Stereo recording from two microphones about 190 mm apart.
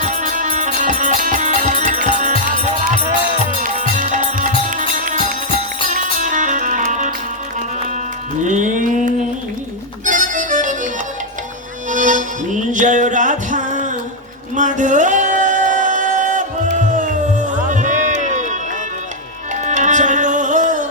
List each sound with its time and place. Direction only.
0.0 s music: 40° right (ahead or behind)
8.4 s mantra: 40° right (ahead or behind)
10.1 s accordion: 40° right (ahead or behind)
11.9 s music: 40° right (ahead or behind)
14.5 s singing: 40° right (ahead or behind)
19.6 s music: 40° right (ahead or behind)